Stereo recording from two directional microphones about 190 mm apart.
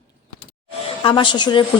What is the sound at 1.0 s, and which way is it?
Speech, 25° left (ahead or behind).